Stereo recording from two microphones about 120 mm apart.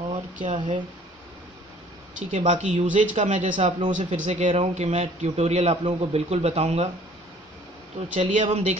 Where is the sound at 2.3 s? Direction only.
75° right (ahead or behind).